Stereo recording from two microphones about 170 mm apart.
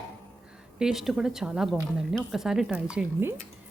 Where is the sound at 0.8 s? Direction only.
Centre (ahead or behind).